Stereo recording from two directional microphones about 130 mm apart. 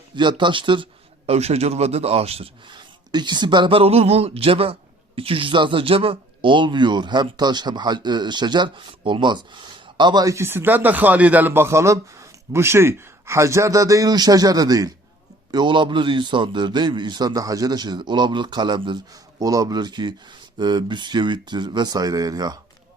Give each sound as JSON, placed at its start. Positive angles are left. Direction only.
{"t": 0.2, "sound": "speech", "side_deg": -35}
{"t": 1.3, "sound": "a man's voice", "side_deg": -50}
{"t": 2.7, "sound": "speech", "side_deg": -35}